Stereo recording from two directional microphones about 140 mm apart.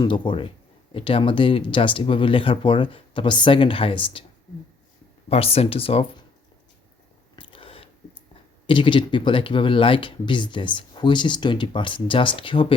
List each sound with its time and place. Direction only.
0.0 s speech: 35° left (ahead or behind)
5.3 s speech: 45° left (ahead or behind)
7.3 s a sound: 40° left (ahead or behind)
8.6 s speech: 35° left (ahead or behind)